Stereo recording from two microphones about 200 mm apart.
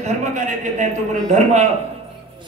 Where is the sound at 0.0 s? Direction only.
35° right (ahead or behind).